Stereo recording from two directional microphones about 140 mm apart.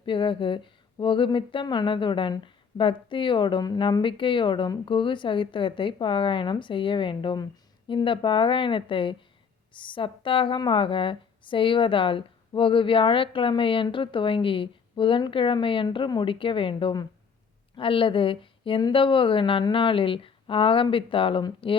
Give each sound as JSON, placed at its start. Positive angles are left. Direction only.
{"t": 0.0, "sound": "speech", "side_deg": 35}